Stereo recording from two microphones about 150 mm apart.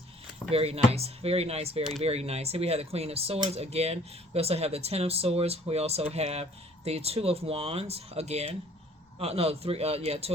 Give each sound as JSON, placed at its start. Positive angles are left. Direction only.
{"t": 0.5, "sound": "speech", "side_deg": -40}